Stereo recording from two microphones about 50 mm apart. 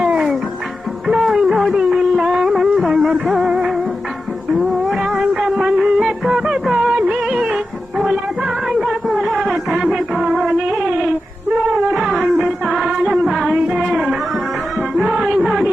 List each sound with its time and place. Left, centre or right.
0.0 s music: centre
8.8 s a sound: centre
9.4 s music: centre
10.7 s a sound: centre
11.7 s wild animals: centre
11.9 s music: centre
14.8 s music: centre
15.1 s music: centre
15.4 s a sound: centre